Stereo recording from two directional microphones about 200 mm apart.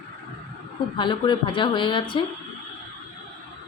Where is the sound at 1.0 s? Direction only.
25° left (ahead or behind).